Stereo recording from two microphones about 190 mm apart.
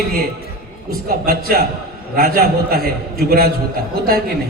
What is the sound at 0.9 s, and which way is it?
A man's voice, 50° right (ahead or behind).